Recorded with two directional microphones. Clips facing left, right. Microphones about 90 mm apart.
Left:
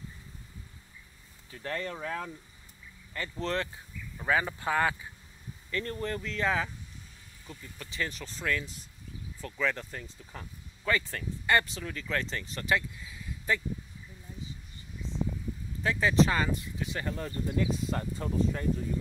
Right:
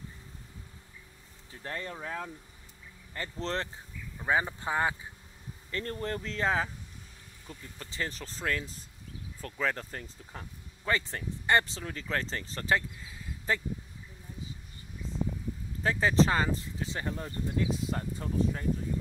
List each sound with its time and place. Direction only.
1.5 s speech: 25° right (ahead or behind)
5.7 s speech: 35° right (ahead or behind)
10.9 s speech: 30° right (ahead or behind)
15.8 s speech: 40° right (ahead or behind)
17.1 s speech: 10° right (ahead or behind)